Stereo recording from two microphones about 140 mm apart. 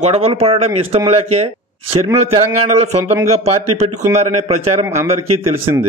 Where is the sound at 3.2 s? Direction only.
50° right (ahead or behind).